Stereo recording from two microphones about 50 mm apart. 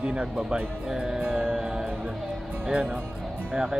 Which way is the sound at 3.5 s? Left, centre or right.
Centre.